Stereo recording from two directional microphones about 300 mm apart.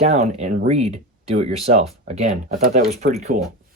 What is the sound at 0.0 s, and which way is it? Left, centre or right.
Speech, right.